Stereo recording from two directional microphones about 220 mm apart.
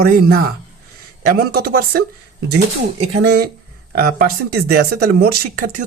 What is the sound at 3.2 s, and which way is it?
Speech, 50° right (ahead or behind).